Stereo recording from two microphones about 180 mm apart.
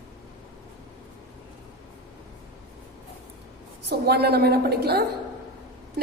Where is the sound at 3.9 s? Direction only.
65° right (ahead or behind).